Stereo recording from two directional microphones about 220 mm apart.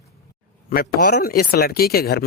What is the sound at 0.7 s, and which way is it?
A woman's voice, 40° left (ahead or behind).